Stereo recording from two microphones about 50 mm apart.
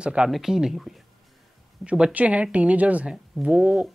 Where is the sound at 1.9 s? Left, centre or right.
Centre.